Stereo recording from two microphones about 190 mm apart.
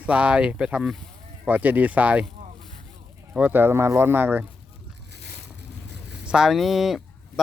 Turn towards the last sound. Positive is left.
turn(degrees=0)  # may be behind; listen again after turning